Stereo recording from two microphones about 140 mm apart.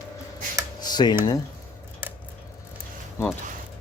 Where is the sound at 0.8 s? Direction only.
30° left (ahead or behind).